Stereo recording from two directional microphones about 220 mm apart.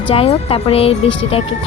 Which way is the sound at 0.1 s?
25° left (ahead or behind).